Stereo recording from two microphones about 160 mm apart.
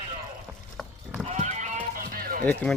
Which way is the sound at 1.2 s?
45° right (ahead or behind).